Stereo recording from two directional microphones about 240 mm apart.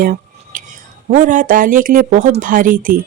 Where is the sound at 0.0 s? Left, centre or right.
Right.